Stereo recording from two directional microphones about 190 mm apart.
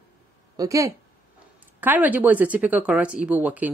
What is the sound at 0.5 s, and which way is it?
Speech, 15° right (ahead or behind).